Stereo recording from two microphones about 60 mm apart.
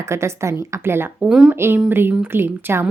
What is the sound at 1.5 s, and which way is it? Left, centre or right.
Speech, right.